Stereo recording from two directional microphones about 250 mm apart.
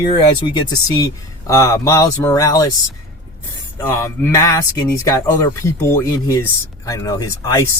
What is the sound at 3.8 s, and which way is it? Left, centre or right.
Speech, centre.